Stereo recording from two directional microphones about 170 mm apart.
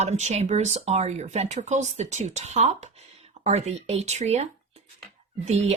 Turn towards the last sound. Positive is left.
turn(degrees=-40)  # may be behind; listen again after turning